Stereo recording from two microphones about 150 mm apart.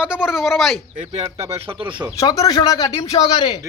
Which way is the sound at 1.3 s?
20° right (ahead or behind).